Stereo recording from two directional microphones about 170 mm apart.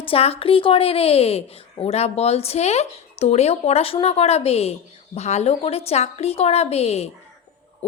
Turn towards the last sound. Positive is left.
turn(degrees=40)  # may be behind; listen again after turning